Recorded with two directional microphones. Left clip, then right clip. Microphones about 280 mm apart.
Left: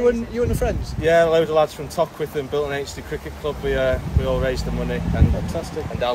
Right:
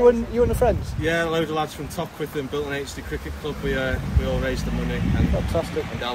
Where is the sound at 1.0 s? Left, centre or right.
Centre.